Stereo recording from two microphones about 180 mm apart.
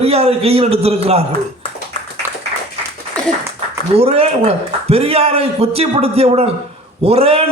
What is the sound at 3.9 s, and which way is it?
A man's voice, 35° right (ahead or behind).